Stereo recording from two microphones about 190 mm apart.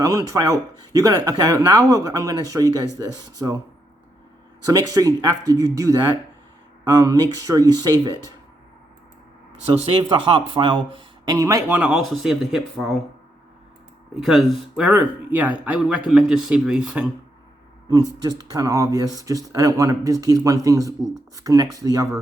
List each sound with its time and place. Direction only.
0.0 s speech: 20° right (ahead or behind)
4.6 s speech: 20° right (ahead or behind)
9.8 s speech: 25° right (ahead or behind); by 13.0 s centre (ahead or behind)
14.2 s speech: centre (ahead or behind)
17.8 s speech: 20° right (ahead or behind)